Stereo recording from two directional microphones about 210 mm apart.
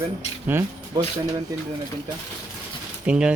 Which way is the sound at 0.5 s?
10° right (ahead or behind).